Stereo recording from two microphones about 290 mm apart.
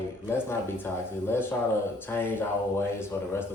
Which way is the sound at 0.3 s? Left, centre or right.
Centre.